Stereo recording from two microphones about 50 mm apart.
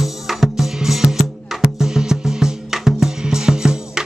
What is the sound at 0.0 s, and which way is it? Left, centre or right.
Music, centre.